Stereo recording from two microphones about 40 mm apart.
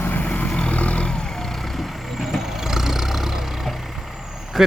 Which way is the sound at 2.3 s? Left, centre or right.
Centre.